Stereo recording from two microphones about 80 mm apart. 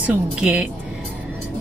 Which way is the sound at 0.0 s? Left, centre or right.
Centre.